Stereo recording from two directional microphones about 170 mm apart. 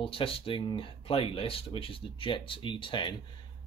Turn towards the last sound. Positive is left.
turn(degrees=30)  # may be behind; listen again after turning